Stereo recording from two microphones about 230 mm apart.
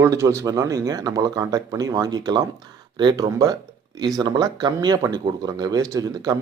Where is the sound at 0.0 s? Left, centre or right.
Centre.